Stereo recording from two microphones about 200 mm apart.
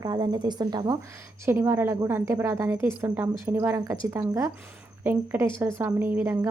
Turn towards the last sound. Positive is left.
turn(degrees=-10)  # may be behind; listen again after turning